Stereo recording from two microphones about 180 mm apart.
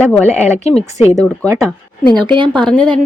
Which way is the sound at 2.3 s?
25° right (ahead or behind).